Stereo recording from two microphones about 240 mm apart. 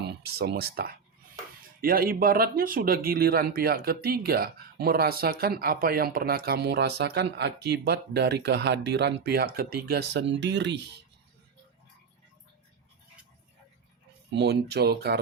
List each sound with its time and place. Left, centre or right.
0.0 s speech: right
14.3 s speech: right